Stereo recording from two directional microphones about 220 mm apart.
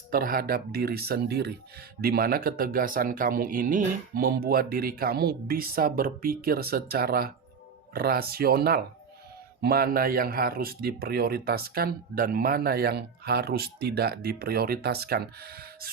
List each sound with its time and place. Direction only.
0.1 s a man's voice: 40° right (ahead or behind)